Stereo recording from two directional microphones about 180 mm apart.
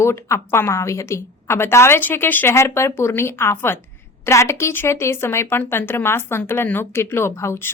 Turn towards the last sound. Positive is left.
turn(degrees=15)  # may be behind; listen again after turning